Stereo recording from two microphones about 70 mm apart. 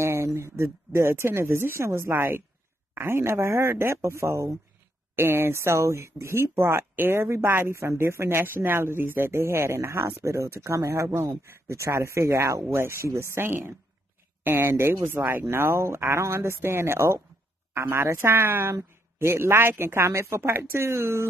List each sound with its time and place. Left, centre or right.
0.0 s speech: right
5.1 s speech: right
15.5 s speech: right